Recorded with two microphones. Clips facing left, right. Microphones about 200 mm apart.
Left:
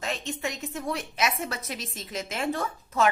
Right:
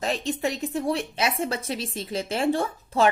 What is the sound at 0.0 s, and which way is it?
A woman's voice, 35° right (ahead or behind).